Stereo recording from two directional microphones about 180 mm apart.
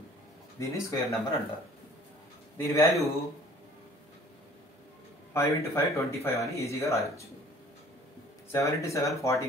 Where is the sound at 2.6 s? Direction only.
15° left (ahead or behind).